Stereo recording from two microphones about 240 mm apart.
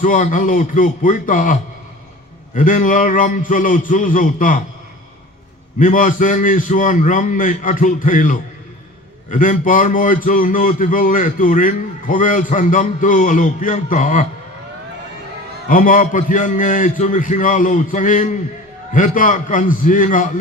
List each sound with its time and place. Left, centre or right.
0.0 s a man's voice: left
2.6 s a man's voice: left
5.8 s a man's voice: left
15.7 s a man's voice: left